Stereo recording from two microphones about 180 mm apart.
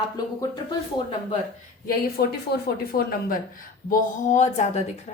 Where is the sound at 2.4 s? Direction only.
60° left (ahead or behind).